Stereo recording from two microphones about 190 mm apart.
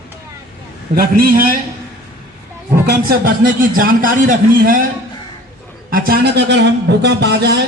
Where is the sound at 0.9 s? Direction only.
50° right (ahead or behind).